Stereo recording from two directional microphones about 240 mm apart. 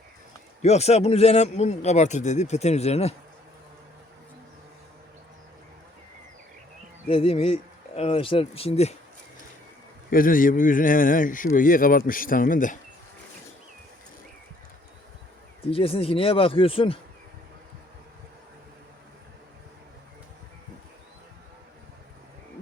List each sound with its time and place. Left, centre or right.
0.6 s a man's voice: left
7.1 s a man's voice: left
10.1 s a man's voice: left
15.7 s a man's voice: left